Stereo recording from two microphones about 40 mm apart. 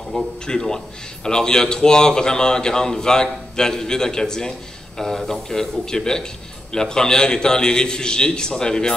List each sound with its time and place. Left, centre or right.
0.1 s a man's voice: centre